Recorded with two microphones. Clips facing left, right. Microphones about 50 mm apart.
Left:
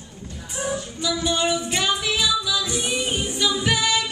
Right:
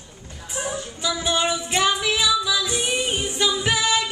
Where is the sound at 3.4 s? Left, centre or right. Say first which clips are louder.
Even; centre.